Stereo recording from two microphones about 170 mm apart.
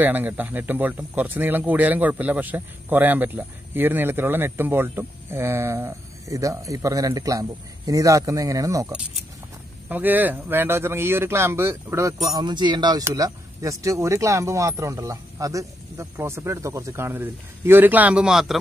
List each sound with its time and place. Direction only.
0.0 s speech: 10° right (ahead or behind)